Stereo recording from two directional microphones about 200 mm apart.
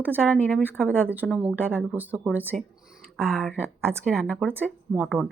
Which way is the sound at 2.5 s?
Centre (ahead or behind).